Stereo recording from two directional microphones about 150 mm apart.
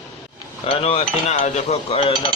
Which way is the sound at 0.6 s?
40° left (ahead or behind).